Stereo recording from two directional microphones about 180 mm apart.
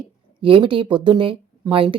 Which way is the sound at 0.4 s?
30° right (ahead or behind).